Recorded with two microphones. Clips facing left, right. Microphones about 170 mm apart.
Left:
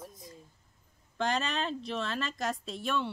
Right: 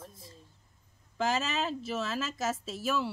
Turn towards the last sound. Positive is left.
turn(degrees=-5)  # may be behind; listen again after turning